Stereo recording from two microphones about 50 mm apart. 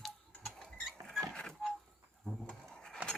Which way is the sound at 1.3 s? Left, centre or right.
Centre.